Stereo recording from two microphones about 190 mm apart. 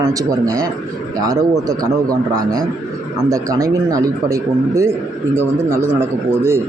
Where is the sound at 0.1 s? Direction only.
20° right (ahead or behind).